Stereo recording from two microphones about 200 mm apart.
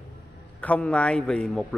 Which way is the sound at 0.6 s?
5° left (ahead or behind).